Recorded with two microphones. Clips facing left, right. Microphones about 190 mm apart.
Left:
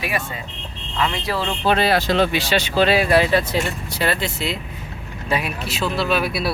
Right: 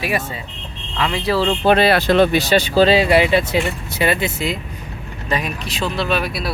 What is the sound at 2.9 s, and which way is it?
Speech, 20° right (ahead or behind).